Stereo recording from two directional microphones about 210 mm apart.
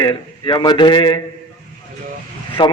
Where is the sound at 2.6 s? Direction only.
25° left (ahead or behind).